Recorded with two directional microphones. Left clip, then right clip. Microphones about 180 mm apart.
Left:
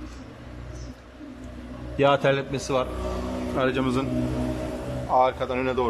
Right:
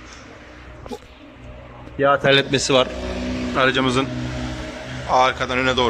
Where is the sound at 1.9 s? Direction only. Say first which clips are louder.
Right 3 dB; 25° left (ahead or behind).